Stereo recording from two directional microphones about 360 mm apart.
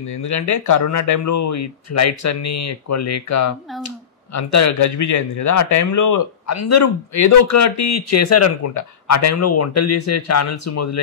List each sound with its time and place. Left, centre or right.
0.1 s speech: left